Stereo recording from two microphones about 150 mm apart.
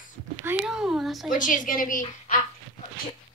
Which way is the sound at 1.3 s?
60° left (ahead or behind).